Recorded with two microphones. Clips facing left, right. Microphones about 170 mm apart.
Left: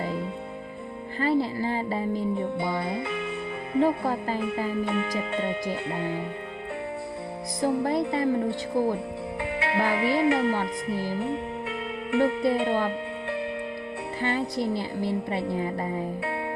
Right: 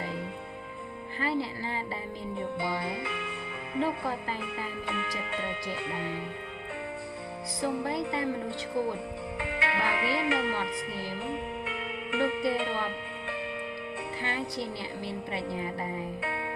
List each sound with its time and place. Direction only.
1.2 s speech: 45° left (ahead or behind)
2.6 s music: 40° left (ahead or behind)
3.8 s speech: 45° left (ahead or behind)
7.6 s speech: 45° left (ahead or behind)
14.2 s speech: 50° left (ahead or behind)